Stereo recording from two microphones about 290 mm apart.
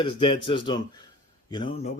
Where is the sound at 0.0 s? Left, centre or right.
Centre.